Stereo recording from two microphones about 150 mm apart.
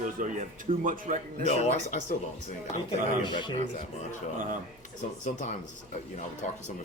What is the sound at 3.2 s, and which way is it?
Speech, 30° left (ahead or behind).